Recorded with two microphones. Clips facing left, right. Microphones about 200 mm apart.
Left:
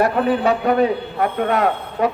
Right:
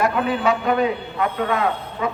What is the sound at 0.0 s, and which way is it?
A man's voice, 35° left (ahead or behind).